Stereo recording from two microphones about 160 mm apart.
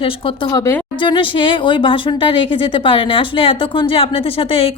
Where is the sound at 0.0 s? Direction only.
35° left (ahead or behind).